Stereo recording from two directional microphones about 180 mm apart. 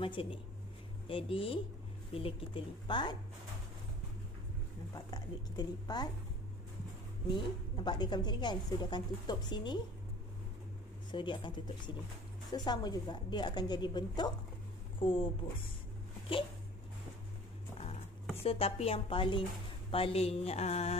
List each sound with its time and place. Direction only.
0.0 s a woman's voice: 30° left (ahead or behind)
4.9 s a woman's voice: 20° left (ahead or behind)
7.7 s a woman's voice: 25° left (ahead or behind)
11.1 s a woman's voice: 25° left (ahead or behind)
18.4 s music: 30° left (ahead or behind)